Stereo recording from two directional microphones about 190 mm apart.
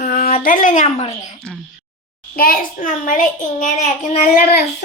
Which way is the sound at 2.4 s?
45° left (ahead or behind).